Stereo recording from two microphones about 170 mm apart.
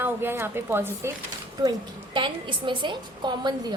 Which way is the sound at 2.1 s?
30° right (ahead or behind).